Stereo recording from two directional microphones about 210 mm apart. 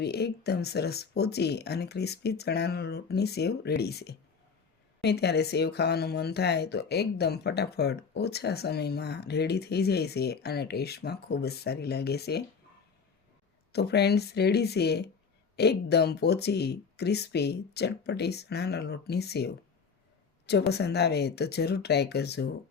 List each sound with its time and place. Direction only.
0.0 s speech: 50° left (ahead or behind)
13.7 s speech: 50° left (ahead or behind)
20.5 s speech: 50° left (ahead or behind)